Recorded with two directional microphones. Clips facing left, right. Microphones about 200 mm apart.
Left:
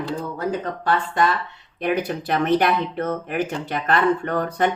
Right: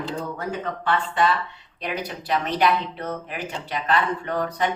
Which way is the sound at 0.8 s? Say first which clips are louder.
Left 2 dB; 40° left (ahead or behind).